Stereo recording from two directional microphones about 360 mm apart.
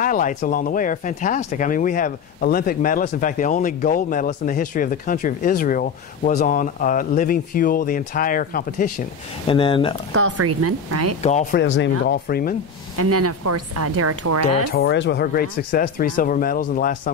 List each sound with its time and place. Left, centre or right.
0.0 s speech: left
10.1 s speech: right
11.2 s speech: centre
11.6 s speech: left
12.9 s speech: right
14.7 s speech: left